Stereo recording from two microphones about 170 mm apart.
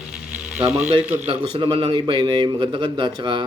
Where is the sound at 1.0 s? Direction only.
10° right (ahead or behind).